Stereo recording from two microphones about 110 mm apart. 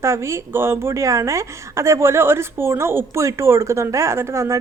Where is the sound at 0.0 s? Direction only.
25° right (ahead or behind).